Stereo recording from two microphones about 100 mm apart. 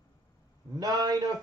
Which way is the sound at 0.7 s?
40° right (ahead or behind).